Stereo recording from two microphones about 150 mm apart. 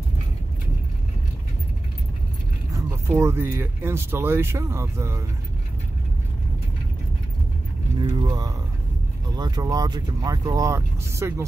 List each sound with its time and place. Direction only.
2.7 s speech: 15° right (ahead or behind)
8.0 s speech: 30° right (ahead or behind)